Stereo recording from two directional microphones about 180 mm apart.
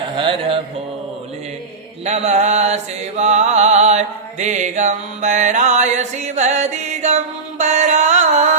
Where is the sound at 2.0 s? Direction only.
40° right (ahead or behind).